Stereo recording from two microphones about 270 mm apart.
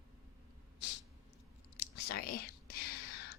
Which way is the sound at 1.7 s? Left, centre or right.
Left.